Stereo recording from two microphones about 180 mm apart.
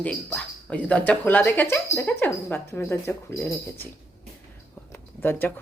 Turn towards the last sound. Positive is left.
turn(degrees=10)  # may be behind; listen again after turning